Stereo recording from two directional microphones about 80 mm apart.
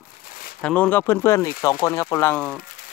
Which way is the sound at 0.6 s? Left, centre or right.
Centre.